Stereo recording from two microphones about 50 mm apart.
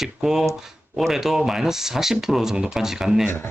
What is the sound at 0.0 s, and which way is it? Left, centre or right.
Speech, centre.